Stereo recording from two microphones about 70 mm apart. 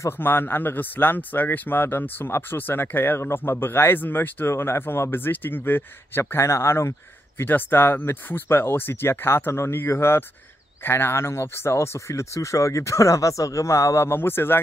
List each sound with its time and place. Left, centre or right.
0.2 s speech: left
7.4 s speech: left